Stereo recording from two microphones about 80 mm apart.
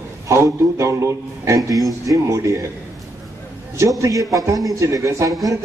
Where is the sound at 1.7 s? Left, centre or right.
Centre.